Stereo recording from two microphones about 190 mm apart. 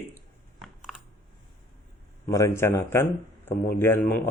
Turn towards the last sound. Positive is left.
turn(degrees=10)  # may be behind; listen again after turning